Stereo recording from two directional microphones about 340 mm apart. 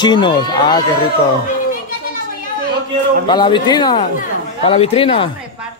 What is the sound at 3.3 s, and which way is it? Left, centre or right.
Speech, centre.